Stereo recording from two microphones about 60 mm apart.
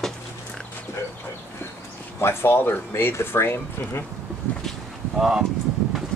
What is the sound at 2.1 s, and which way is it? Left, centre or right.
Speech, left.